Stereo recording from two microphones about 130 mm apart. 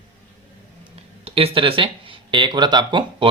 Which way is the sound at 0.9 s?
50° right (ahead or behind).